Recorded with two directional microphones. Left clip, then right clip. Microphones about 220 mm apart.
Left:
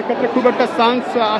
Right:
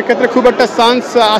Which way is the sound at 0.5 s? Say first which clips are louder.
Right 5 dB; 20° right (ahead or behind).